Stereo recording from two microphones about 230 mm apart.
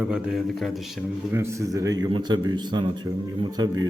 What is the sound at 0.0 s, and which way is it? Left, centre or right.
Speech, centre.